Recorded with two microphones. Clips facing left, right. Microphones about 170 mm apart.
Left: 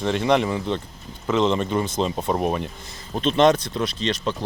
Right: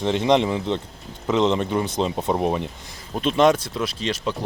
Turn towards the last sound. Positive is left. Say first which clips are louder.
# left 1 dB
turn(degrees=-10)  # may be behind; listen again after turning